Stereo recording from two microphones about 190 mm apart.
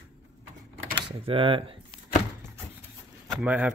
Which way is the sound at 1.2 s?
25° right (ahead or behind).